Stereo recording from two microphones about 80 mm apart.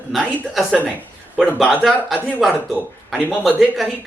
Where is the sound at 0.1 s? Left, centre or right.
Centre.